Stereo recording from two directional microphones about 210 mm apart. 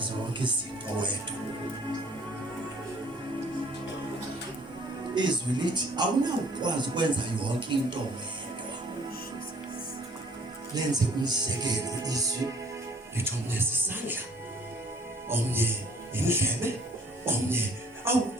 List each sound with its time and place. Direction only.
0.0 s music: 20° right (ahead or behind)
5.1 s speech: 20° right (ahead or behind)
10.8 s speech: 20° right (ahead or behind)
15.3 s speech: 10° right (ahead or behind)